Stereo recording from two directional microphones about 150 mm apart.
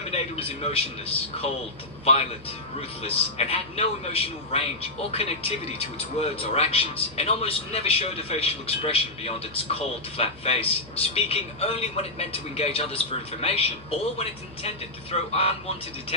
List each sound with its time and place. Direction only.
0.1 s a man's voice: 40° left (ahead or behind)
3.0 s a man's voice: 40° left (ahead or behind)